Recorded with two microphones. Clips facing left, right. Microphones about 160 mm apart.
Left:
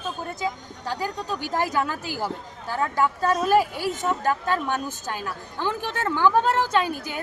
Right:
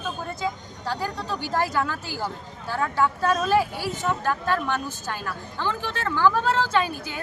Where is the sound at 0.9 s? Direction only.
15° left (ahead or behind).